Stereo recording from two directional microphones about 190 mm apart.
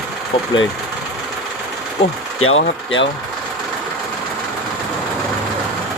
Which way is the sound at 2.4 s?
90° left.